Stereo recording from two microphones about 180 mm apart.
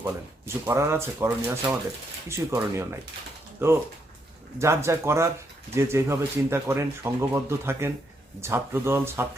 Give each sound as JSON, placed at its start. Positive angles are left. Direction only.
{"t": 0.0, "sound": "speech", "side_deg": -15}